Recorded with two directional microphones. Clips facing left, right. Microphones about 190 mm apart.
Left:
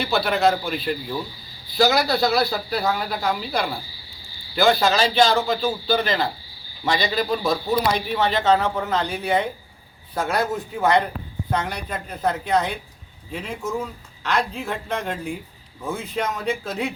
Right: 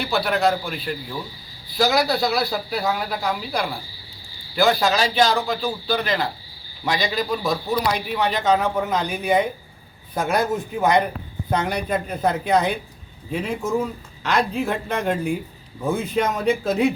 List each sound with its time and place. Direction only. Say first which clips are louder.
0.0 s speech: left 1 dB; 5° right (ahead or behind)
8.4 s a man's voice: right 2 dB; 15° right (ahead or behind)